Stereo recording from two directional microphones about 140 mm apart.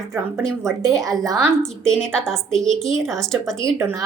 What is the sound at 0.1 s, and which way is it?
Speech, 20° right (ahead or behind).